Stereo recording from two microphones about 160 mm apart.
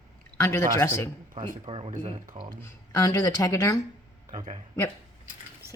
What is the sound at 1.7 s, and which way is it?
Speech, 35° right (ahead or behind).